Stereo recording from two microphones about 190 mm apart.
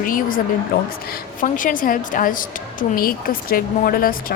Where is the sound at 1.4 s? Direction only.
45° left (ahead or behind).